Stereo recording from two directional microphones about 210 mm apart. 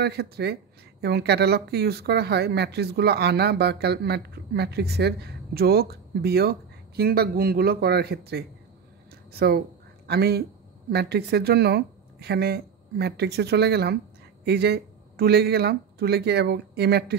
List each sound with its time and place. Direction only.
0.0 s a man's voice: 50° right (ahead or behind)